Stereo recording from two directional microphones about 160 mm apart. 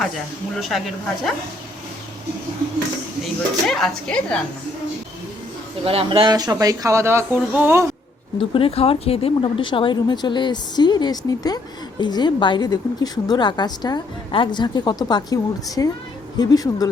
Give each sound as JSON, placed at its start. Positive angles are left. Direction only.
{"t": 0.6, "sound": "speech", "side_deg": 0}
{"t": 3.7, "sound": "speech", "side_deg": 0}
{"t": 5.8, "sound": "speech", "side_deg": -35}
{"t": 8.4, "sound": "speech", "side_deg": 35}